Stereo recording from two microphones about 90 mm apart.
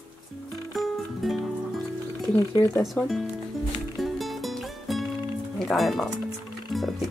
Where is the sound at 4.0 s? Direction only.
Centre (ahead or behind).